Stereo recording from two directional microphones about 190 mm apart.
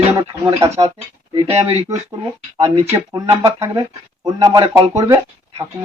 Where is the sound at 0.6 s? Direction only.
15° right (ahead or behind).